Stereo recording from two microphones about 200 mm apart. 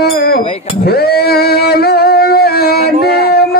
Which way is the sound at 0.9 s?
50° left (ahead or behind).